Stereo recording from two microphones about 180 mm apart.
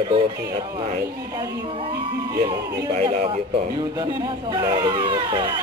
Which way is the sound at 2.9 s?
40° right (ahead or behind).